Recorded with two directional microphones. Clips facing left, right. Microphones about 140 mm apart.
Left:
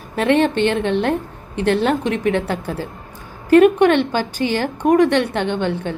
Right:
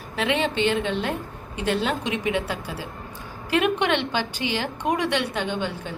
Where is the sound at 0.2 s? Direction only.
50° left (ahead or behind).